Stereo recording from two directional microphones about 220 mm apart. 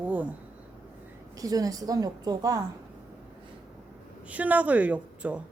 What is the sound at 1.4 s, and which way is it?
A woman's voice, 15° right (ahead or behind).